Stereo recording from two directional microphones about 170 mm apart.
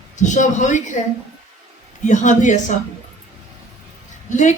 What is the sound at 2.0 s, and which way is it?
Speech, 45° left (ahead or behind).